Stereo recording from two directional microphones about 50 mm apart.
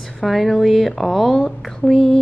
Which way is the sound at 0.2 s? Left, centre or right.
Centre.